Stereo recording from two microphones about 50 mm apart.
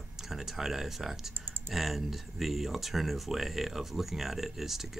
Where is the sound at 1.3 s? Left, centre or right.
Right.